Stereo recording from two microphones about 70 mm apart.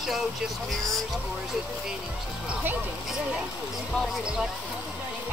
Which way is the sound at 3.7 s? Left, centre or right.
Centre.